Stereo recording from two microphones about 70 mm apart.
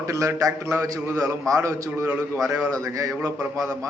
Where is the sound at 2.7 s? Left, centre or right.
Right.